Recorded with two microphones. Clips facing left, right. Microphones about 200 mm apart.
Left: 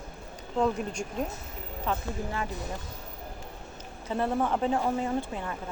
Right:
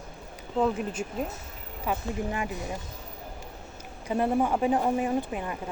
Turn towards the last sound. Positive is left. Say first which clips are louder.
# right 2 dB
turn(degrees=-15)  # may be behind; listen again after turning